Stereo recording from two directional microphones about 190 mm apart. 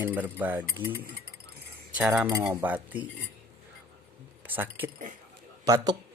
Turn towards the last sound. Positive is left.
turn(degrees=-20)  # may be behind; listen again after turning